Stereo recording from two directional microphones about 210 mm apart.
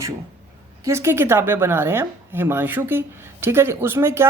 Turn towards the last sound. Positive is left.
turn(degrees=-10)  # may be behind; listen again after turning